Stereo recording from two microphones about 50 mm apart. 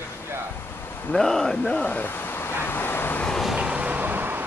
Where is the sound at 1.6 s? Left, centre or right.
Left.